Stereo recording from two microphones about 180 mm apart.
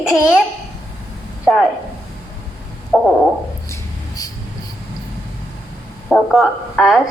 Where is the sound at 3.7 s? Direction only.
20° left (ahead or behind).